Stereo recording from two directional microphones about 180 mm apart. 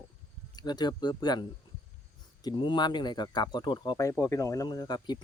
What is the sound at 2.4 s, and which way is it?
Speech, 25° left (ahead or behind).